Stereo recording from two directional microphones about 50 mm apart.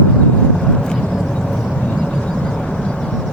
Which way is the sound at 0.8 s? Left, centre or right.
Centre.